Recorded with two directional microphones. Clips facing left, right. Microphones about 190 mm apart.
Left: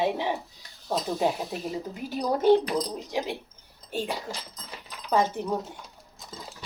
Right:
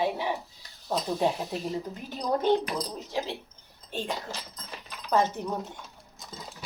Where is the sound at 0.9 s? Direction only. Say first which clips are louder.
Left 1 dB; 5° left (ahead or behind).